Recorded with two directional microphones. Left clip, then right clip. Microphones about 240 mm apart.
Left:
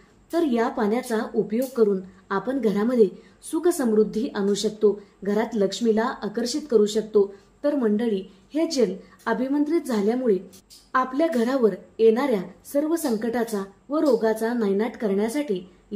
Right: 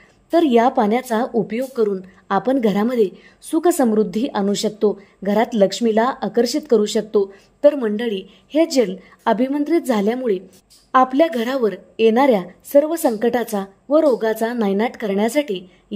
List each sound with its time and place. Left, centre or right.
0.3 s a woman's voice: right